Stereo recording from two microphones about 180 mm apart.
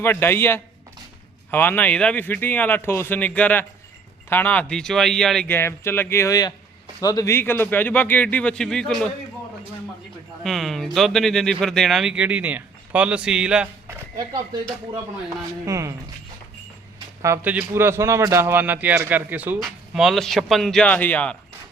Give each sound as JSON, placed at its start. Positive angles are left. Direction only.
{"t": 0.0, "sound": "a man's voice", "side_deg": 10}
{"t": 10.4, "sound": "a sound", "side_deg": 0}
{"t": 10.9, "sound": "speech", "side_deg": 0}
{"t": 15.6, "sound": "a man's voice", "side_deg": -15}
{"t": 17.2, "sound": "a man's voice", "side_deg": -10}